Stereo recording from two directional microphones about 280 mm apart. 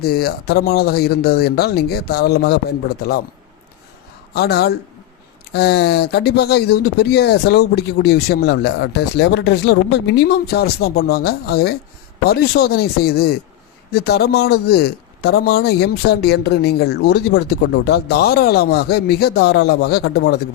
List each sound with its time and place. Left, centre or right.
0.0 s speech: left
4.4 s speech: left